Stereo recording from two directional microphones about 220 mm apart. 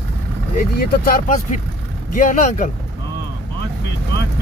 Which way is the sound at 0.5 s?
40° left (ahead or behind).